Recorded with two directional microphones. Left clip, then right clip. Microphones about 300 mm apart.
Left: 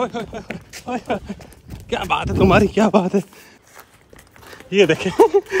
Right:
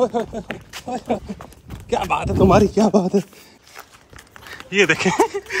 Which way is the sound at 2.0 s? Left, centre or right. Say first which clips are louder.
Left 4 dB; centre.